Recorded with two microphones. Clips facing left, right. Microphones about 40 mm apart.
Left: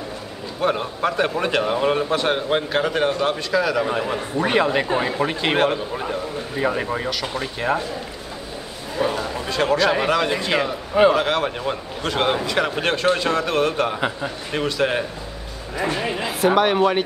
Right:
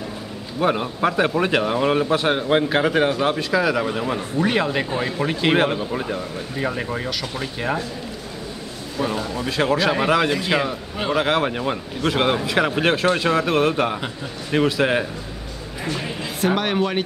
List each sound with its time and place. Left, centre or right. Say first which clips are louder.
0.6 s a man's voice: right 1 dB; centre
4.4 s a man's voice: left 2 dB; centre
9.0 s speech: left 2 dB; centre
9.4 s a man's voice: left 1 dB; centre
15.8 s a sound: left 4 dB; left
16.3 s a man's voice: left 3 dB; centre